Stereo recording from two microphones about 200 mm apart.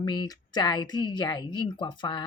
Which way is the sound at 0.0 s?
20° left (ahead or behind).